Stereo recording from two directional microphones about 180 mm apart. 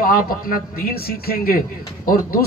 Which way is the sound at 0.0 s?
55° left (ahead or behind).